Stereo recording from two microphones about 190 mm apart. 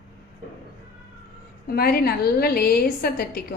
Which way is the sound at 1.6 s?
55° left (ahead or behind).